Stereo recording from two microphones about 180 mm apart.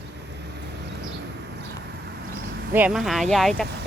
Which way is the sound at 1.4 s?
65° right (ahead or behind).